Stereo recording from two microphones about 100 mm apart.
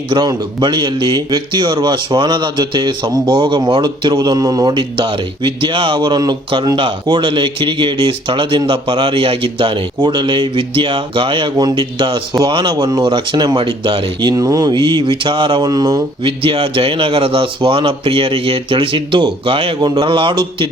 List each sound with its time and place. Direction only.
0.1 s speech: 45° right (ahead or behind)
16.2 s a man's voice: 60° right (ahead or behind)